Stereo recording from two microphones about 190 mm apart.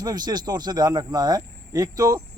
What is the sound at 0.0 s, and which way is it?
Speech, 20° right (ahead or behind).